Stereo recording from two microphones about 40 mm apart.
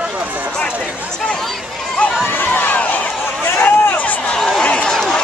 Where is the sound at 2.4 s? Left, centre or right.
Left.